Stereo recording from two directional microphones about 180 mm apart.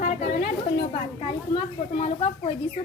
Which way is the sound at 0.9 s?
35° left (ahead or behind).